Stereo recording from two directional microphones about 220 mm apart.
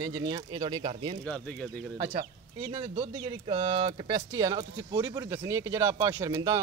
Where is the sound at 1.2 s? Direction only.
5° left (ahead or behind).